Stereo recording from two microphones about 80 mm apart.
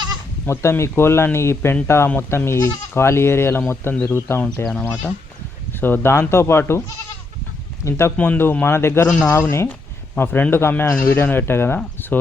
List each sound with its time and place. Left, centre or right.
0.4 s speech: left
4.7 s speech: centre
7.9 s speech: left
8.1 s speech: left
9.0 s speech: centre
9.3 s speech: left
11.9 s a sound: left